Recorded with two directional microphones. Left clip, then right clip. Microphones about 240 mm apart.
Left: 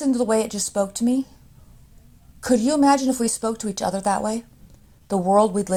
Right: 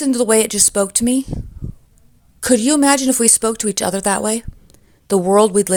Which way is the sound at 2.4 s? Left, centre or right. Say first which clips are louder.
Right 4 dB; right.